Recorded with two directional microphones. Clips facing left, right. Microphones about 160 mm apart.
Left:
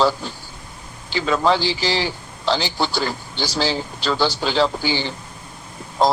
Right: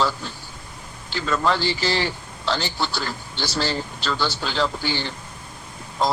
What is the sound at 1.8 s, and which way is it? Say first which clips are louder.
Speech: left 1 dB; 90° left.